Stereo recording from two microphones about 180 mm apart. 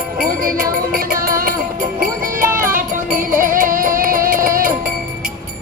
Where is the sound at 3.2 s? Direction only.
50° right (ahead or behind).